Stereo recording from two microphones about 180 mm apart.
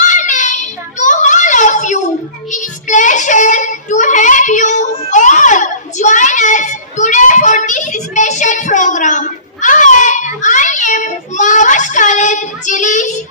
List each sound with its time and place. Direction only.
0.0 s child singing: 45° left (ahead or behind)